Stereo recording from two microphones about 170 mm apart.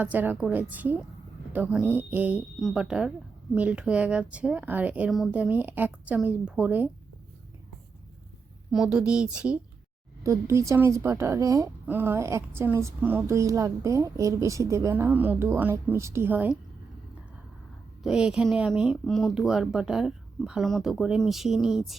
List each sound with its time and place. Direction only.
0.0 s a woman's voice: 10° right (ahead or behind)
8.7 s speech: 5° right (ahead or behind)
10.2 s a woman's voice: 15° right (ahead or behind)
18.0 s speech: 5° right (ahead or behind)